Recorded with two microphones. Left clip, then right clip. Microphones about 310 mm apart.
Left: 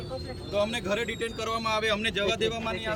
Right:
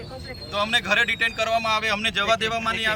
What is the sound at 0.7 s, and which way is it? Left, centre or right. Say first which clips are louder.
A man's voice: right 9 dB; centre.